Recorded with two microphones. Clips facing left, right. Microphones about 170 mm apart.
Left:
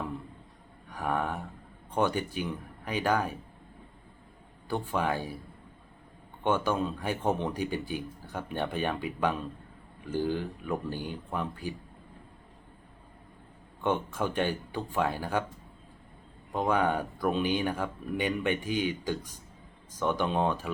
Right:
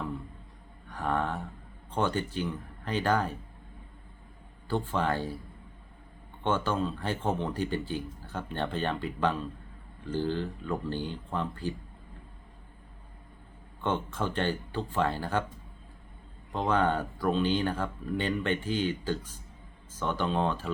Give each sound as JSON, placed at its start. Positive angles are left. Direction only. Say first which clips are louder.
{"t": 0.9, "sound": "a sound", "louder": "right 1 dB", "side_deg": 10}
{"t": 1.9, "sound": "speech", "louder": "left 1 dB", "side_deg": 15}
{"t": 4.7, "sound": "speech", "louder": "right 1 dB", "side_deg": 15}
{"t": 6.4, "sound": "speech", "louder": "left 1 dB", "side_deg": 15}
{"t": 13.8, "sound": "speech", "louder": "left 1 dB", "side_deg": 15}
{"t": 16.5, "sound": "speech", "louder": "even", "side_deg": 10}